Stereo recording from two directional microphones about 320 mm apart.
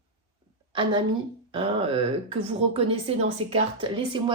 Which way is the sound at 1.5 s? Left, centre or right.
Centre.